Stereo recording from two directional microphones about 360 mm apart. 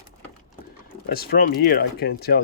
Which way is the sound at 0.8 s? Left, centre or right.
Left.